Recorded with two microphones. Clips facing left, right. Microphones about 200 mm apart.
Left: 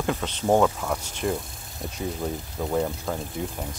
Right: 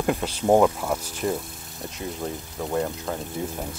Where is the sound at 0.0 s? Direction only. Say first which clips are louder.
Right 2 dB; 5° right (ahead or behind).